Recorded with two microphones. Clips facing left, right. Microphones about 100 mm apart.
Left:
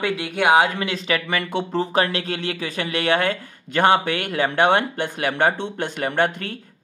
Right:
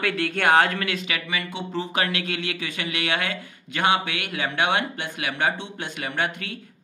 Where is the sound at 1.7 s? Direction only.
35° left (ahead or behind).